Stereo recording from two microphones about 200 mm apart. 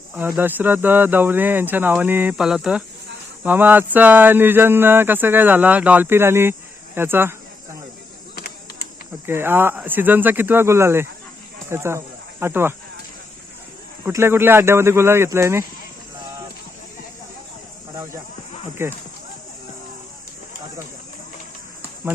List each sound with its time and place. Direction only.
0.1 s speech: 10° right (ahead or behind)
8.4 s a sound: 50° left (ahead or behind)
9.2 s speech: 10° right (ahead or behind)
14.0 s speech: 15° right (ahead or behind)
18.8 s speech: 10° right (ahead or behind)